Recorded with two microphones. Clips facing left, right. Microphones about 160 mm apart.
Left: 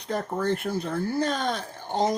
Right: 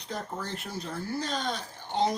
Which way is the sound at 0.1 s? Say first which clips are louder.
Left 9 dB; 55° left (ahead or behind).